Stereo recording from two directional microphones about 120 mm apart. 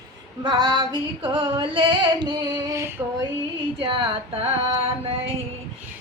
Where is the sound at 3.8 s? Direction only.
50° right (ahead or behind).